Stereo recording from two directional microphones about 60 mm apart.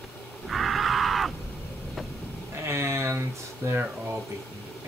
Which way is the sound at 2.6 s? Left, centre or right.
Right.